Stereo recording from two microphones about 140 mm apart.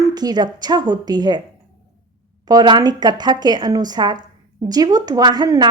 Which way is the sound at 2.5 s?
30° right (ahead or behind).